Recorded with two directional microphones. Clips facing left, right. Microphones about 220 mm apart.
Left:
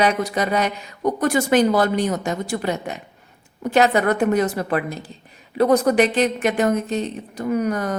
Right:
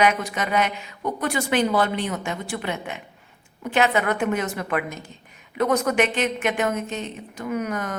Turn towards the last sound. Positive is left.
turn(degrees=35)  # may be behind; listen again after turning